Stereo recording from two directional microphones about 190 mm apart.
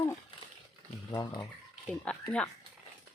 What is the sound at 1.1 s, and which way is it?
Speech, 20° left (ahead or behind).